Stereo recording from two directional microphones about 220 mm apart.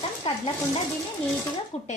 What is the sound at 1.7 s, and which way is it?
Speech, 30° left (ahead or behind).